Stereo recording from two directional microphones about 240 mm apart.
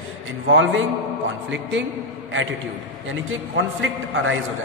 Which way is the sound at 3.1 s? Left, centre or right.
Right.